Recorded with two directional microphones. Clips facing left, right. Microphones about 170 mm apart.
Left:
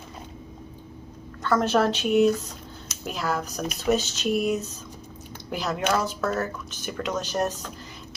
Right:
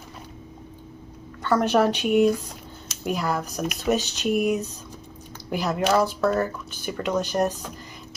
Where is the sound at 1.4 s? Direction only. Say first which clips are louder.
Right 2 dB; 10° right (ahead or behind).